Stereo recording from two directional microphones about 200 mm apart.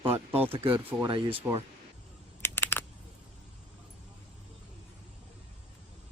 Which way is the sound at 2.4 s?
10° left (ahead or behind).